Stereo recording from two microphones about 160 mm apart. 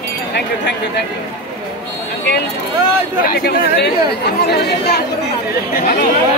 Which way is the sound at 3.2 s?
80° left.